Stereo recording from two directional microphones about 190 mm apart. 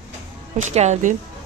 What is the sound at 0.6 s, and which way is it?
Speech, 35° right (ahead or behind).